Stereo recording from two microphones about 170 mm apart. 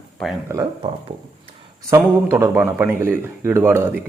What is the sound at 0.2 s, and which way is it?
Speech, 5° left (ahead or behind).